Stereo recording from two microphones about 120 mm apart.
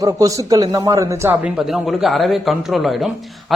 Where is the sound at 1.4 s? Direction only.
5° right (ahead or behind).